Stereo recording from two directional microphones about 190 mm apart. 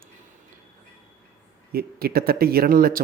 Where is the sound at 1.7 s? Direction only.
50° right (ahead or behind).